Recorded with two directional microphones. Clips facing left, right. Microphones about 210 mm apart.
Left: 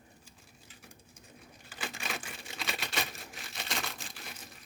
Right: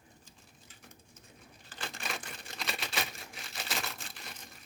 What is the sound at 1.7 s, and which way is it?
Crumpling, 5° left (ahead or behind).